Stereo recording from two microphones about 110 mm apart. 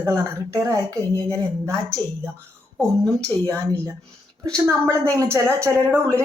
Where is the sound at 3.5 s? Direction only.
25° right (ahead or behind).